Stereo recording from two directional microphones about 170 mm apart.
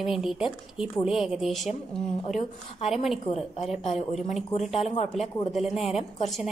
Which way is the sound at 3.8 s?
40° left (ahead or behind).